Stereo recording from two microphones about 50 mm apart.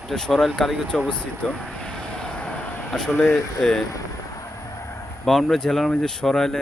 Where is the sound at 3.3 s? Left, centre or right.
Centre.